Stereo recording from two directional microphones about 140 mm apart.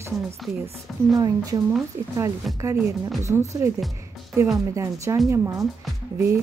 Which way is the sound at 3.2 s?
20° right (ahead or behind).